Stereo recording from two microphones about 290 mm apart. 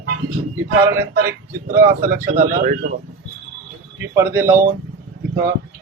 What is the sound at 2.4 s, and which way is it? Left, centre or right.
Speech, right.